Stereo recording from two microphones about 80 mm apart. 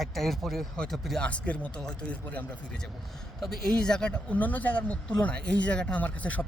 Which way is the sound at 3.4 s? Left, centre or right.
Centre.